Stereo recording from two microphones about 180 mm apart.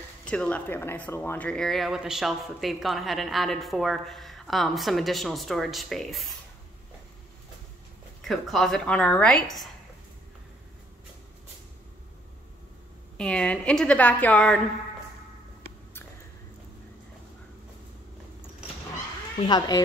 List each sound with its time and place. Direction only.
0.2 s speech: 5° left (ahead or behind)
8.2 s speech: centre (ahead or behind)
13.2 s speech: 5° left (ahead or behind)
19.4 s speech: 25° left (ahead or behind)